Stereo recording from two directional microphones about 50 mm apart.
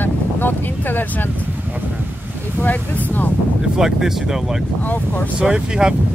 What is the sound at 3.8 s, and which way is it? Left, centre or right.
Speech, centre.